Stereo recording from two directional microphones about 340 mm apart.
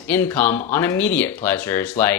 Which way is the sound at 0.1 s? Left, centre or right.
Centre.